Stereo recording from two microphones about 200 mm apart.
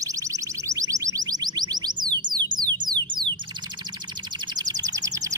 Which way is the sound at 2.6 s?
20° right (ahead or behind).